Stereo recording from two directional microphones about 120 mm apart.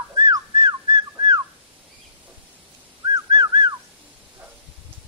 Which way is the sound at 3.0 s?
40° right (ahead or behind).